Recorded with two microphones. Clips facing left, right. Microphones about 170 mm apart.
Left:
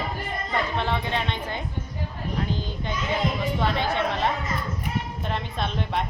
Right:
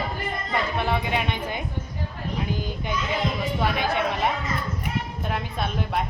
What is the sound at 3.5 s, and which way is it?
Speech, 10° right (ahead or behind).